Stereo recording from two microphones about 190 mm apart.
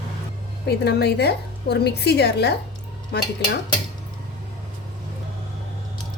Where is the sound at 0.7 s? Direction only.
60° left (ahead or behind).